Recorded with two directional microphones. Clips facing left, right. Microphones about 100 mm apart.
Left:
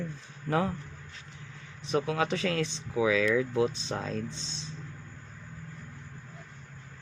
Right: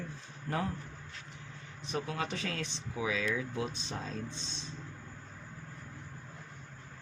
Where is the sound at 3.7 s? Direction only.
90° left.